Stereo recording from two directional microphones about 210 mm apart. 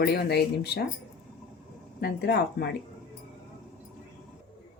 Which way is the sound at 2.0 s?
50° left (ahead or behind).